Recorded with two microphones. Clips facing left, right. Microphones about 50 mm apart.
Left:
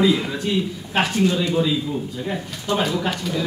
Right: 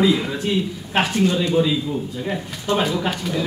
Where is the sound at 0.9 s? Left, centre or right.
Centre.